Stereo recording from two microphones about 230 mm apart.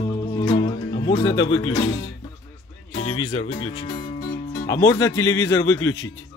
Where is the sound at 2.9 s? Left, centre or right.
Left.